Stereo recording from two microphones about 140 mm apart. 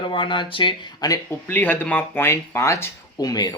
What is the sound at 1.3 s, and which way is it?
Speech, 15° left (ahead or behind).